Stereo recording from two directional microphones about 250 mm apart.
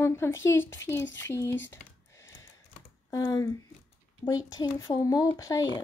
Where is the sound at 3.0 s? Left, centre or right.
Centre.